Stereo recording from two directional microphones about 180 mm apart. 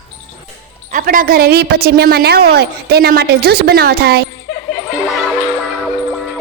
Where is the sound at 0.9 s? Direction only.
50° right (ahead or behind).